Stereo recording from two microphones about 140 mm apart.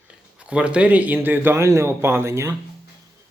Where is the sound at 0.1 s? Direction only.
5° right (ahead or behind).